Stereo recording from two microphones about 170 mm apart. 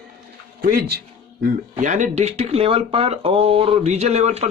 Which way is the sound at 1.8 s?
45° right (ahead or behind).